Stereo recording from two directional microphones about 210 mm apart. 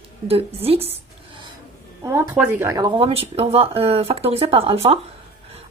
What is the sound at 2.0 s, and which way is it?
Speech, 10° right (ahead or behind).